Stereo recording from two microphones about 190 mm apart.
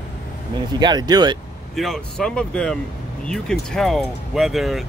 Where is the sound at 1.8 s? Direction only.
Centre (ahead or behind).